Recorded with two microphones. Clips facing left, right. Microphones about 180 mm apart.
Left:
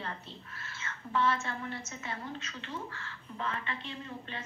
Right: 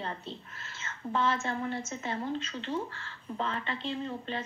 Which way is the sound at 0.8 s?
25° right (ahead or behind).